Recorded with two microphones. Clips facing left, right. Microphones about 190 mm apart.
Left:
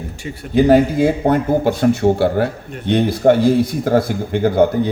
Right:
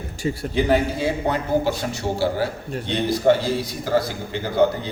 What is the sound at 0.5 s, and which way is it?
A man's voice, 45° left (ahead or behind).